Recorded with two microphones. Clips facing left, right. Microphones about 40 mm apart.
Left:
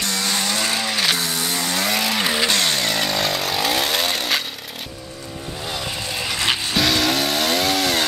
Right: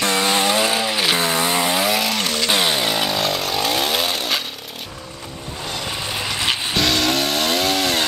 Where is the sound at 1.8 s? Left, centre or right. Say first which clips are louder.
Right 1 dB; centre.